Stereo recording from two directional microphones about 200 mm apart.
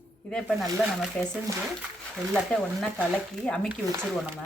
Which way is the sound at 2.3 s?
Centre (ahead or behind).